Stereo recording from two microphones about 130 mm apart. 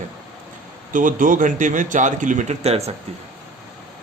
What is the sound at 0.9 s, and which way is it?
Speech, 90° right.